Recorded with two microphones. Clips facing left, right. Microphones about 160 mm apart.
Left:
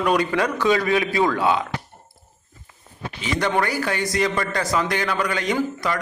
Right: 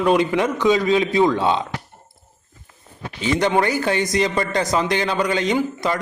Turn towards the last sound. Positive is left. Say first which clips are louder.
# right 2 dB
turn(degrees=-20)  # may be behind; listen again after turning